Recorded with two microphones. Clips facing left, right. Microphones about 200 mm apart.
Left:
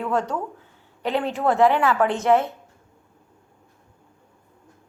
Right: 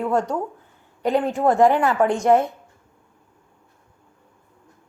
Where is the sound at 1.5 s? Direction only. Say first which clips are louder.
Right 2 dB; 45° right (ahead or behind).